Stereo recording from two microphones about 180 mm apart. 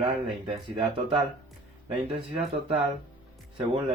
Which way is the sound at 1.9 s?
30° right (ahead or behind).